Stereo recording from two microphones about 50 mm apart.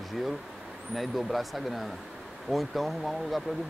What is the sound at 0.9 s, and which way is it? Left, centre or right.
Speech, centre.